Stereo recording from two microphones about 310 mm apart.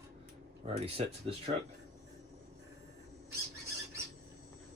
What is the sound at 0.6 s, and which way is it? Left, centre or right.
Speech, centre.